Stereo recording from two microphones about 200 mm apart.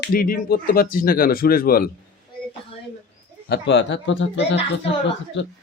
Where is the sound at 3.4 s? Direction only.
60° left (ahead or behind).